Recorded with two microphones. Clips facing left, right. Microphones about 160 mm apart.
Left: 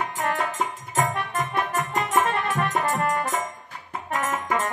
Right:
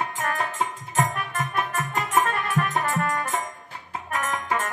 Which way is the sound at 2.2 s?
30° left (ahead or behind).